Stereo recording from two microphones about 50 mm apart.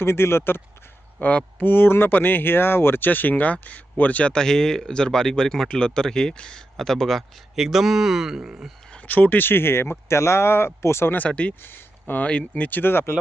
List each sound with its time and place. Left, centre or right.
0.0 s speech: left
1.2 s speech: left
4.4 s speech: centre
7.5 s speech: centre
8.4 s speech: right
9.0 s speech: left
11.3 s speech: left
11.6 s speech: left
12.2 s speech: left
12.8 s speech: left